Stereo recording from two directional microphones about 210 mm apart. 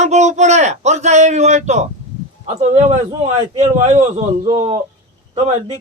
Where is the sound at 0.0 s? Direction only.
35° right (ahead or behind).